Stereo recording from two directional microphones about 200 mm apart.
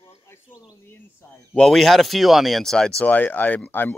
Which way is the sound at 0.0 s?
25° left (ahead or behind).